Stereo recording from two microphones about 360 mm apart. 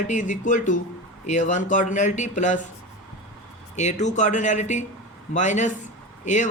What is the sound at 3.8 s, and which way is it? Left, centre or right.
Speech, centre.